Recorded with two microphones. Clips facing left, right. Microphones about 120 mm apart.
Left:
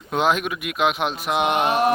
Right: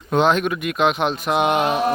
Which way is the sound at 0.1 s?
5° left (ahead or behind).